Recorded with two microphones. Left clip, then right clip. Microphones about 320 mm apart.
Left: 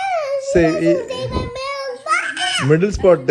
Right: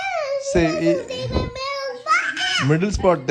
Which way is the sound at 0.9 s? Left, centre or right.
Centre.